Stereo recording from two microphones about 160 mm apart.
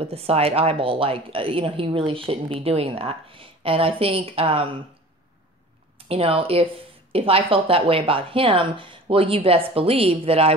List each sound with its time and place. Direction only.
0.0 s speech: 40° right (ahead or behind)
6.0 s speech: 35° right (ahead or behind)